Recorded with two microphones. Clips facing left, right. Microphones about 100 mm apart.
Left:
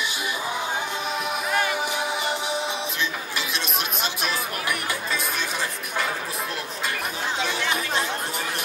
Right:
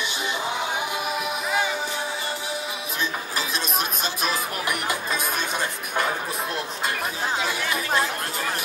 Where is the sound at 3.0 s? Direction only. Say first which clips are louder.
Right 1 dB; 40° right (ahead or behind).